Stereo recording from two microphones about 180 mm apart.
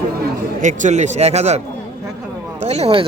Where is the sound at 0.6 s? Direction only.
45° right (ahead or behind).